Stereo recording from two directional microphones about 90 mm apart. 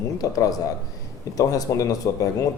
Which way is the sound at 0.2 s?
40° left (ahead or behind).